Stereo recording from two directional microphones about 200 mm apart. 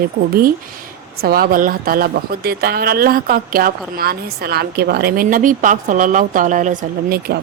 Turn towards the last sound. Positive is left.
turn(degrees=-45)  # may be behind; listen again after turning